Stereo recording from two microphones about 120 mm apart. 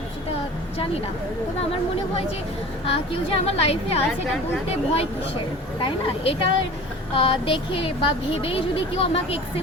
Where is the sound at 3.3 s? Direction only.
60° left (ahead or behind).